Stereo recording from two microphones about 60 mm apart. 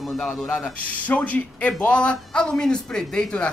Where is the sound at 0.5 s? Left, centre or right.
Left.